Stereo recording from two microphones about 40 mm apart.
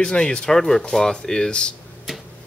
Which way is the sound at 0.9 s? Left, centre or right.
Centre.